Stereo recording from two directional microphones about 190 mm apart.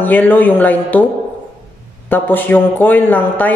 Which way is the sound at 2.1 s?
10° left (ahead or behind).